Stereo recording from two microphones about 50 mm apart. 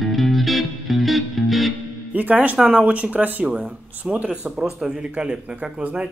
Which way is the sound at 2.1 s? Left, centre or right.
Right.